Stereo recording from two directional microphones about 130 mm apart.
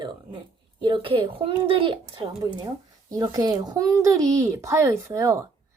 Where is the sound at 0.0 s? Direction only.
35° right (ahead or behind).